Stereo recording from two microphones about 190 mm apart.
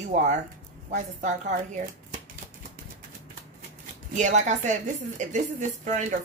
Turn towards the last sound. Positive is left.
turn(degrees=-40)  # may be behind; listen again after turning